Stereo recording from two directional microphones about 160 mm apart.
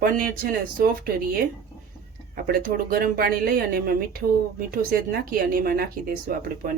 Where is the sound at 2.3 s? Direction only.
70° right (ahead or behind).